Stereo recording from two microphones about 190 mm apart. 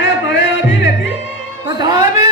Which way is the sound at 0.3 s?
70° left (ahead or behind).